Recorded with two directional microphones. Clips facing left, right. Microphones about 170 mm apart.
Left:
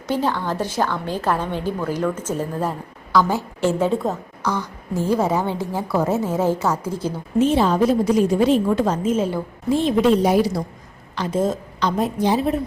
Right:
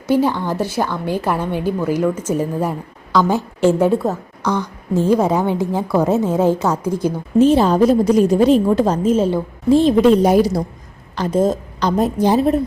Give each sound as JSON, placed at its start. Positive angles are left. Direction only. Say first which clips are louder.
{"t": 0.1, "sound": "a woman's voice", "louder": "right 5 dB", "side_deg": -10}
{"t": 4.5, "sound": "a woman's voice", "louder": "right 6 dB", "side_deg": -20}
{"t": 7.3, "sound": "a woman's voice", "louder": "right 5 dB", "side_deg": -35}